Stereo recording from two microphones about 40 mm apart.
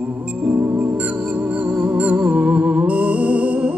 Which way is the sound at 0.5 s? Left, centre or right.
Right.